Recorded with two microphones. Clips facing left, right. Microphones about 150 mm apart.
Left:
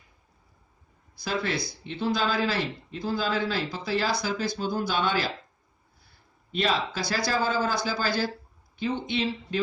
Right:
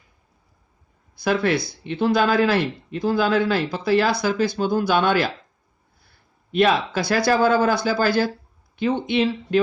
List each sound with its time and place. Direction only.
1.1 s speech: 60° right (ahead or behind)
6.5 s speech: 65° right (ahead or behind)